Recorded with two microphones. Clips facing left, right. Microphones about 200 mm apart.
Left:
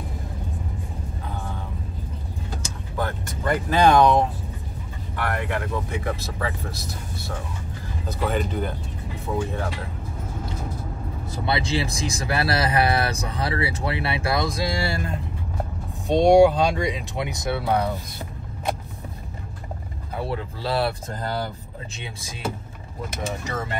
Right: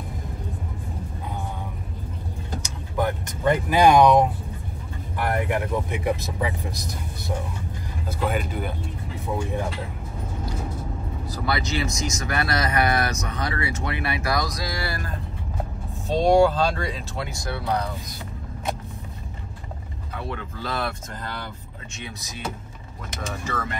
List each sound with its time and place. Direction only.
2.6 s speech: 15° right (ahead or behind)
11.2 s speech: 25° left (ahead or behind)
16.1 s speech: 15° left (ahead or behind)
20.2 s speech: 35° left (ahead or behind)
23.4 s speech: 25° left (ahead or behind)